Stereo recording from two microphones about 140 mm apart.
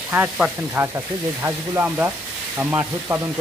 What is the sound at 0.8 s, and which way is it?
Speech, 10° right (ahead or behind).